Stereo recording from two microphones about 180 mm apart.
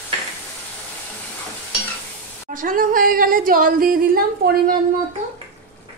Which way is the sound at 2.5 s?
50° right (ahead or behind).